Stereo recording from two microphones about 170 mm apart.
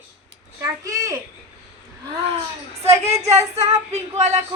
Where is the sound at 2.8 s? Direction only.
40° right (ahead or behind).